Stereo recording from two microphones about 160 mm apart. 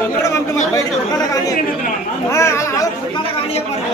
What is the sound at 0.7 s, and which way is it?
Chatter, 20° left (ahead or behind).